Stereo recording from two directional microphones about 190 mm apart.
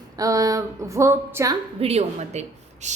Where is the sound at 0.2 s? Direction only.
20° right (ahead or behind).